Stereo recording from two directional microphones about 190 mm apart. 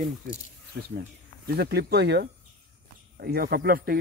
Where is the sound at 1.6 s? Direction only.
60° right (ahead or behind).